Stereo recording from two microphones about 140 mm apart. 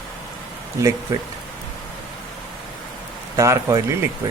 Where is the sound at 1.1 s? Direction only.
20° right (ahead or behind).